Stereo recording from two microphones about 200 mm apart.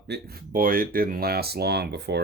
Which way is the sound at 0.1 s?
50° right (ahead or behind).